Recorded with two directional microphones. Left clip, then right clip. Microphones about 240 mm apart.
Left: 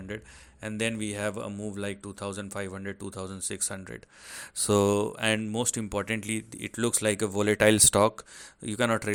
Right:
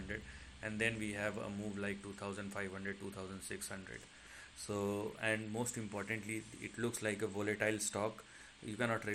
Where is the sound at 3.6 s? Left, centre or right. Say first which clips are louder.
Left 10 dB; left.